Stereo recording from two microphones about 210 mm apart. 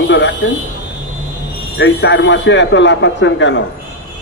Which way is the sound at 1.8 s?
60° left (ahead or behind).